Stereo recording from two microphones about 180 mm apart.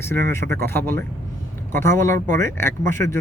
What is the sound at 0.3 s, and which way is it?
Speech, 15° left (ahead or behind).